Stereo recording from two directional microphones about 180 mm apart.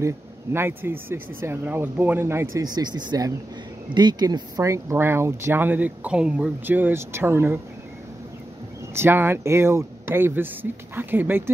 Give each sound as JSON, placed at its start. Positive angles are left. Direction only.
{"t": 0.0, "sound": "speech", "side_deg": -15}
{"t": 8.9, "sound": "speech", "side_deg": -10}